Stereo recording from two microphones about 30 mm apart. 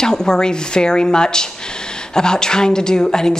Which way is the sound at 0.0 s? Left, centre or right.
Left.